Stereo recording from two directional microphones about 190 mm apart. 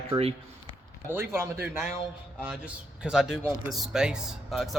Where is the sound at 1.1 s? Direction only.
15° right (ahead or behind).